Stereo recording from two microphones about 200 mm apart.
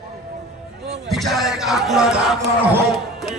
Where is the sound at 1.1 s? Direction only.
Centre (ahead or behind).